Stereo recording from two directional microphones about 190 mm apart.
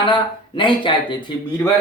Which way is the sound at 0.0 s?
25° left (ahead or behind).